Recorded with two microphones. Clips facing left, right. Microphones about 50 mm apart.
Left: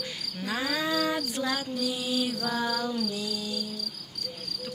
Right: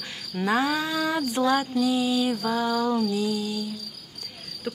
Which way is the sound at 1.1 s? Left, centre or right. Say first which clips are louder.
Right 7 dB; right.